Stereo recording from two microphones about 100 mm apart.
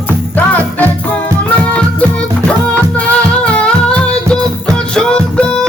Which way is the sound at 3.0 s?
10° left (ahead or behind).